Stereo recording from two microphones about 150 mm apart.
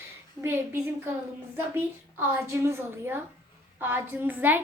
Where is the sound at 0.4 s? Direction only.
15° right (ahead or behind).